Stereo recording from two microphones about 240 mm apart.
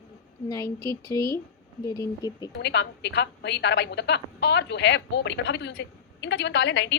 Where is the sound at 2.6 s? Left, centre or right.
Left.